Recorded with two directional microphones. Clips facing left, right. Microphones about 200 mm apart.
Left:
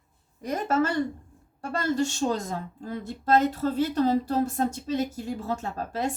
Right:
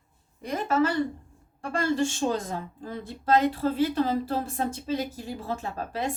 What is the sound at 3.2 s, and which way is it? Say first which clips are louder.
Speech: even; 40° left (ahead or behind).